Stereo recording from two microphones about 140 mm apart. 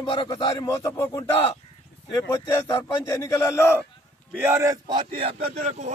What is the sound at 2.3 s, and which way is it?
A man's voice, 20° left (ahead or behind).